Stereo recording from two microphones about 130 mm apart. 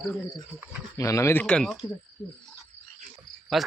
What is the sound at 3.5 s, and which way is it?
Speech, centre (ahead or behind).